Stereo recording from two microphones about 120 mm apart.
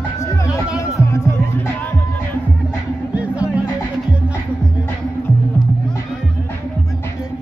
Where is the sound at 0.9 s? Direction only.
25° left (ahead or behind).